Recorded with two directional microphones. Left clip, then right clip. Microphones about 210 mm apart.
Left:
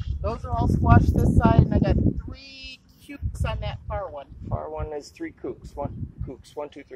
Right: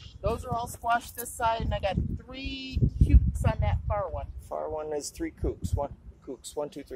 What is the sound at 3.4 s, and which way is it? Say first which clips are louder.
Speech: left 3 dB; 45° left (ahead or behind).